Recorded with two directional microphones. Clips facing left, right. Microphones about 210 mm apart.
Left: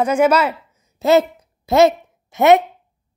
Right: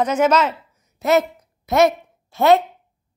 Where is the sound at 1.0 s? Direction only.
30° left (ahead or behind).